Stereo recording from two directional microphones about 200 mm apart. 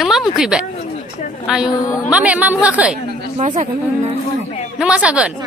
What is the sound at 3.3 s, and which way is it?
Speech, 35° right (ahead or behind).